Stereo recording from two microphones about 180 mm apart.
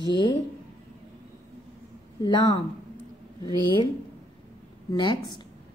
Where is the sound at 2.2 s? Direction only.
25° left (ahead or behind).